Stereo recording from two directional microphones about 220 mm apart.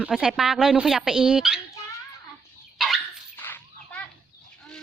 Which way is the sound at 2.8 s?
Centre (ahead or behind).